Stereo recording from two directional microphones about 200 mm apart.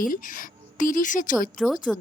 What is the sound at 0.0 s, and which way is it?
A woman's voice, 45° left (ahead or behind).